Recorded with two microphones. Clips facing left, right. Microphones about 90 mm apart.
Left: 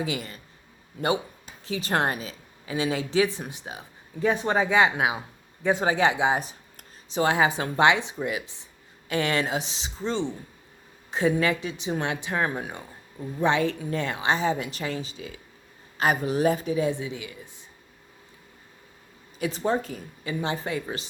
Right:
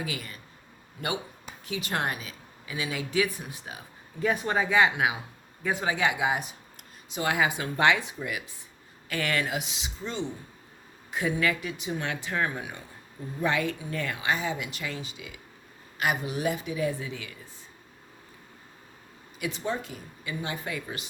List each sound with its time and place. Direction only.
0.0 s speech: 25° left (ahead or behind)
1.6 s speech: 35° left (ahead or behind)
16.8 s speech: 20° left (ahead or behind)
19.4 s speech: 35° left (ahead or behind)